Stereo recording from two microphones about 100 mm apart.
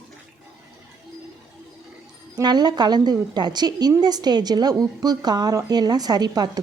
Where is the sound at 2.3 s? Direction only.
45° right (ahead or behind).